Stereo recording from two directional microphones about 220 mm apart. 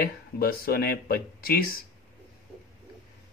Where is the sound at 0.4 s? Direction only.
45° left (ahead or behind).